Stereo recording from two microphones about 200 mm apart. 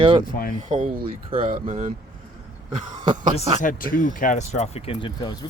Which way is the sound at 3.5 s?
40° left (ahead or behind).